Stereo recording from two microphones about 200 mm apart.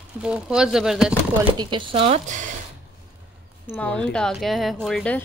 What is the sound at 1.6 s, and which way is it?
Speech, 25° right (ahead or behind).